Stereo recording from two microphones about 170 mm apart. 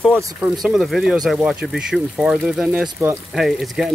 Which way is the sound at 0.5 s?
Centre (ahead or behind).